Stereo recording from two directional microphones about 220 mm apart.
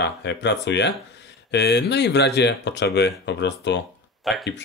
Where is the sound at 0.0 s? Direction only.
50° left (ahead or behind).